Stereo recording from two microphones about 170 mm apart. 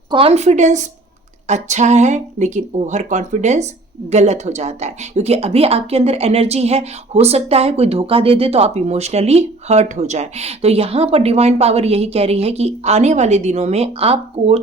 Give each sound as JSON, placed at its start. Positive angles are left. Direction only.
{"t": 0.1, "sound": "speech", "side_deg": -35}